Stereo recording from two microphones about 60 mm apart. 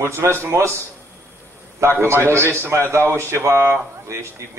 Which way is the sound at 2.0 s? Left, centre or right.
Right.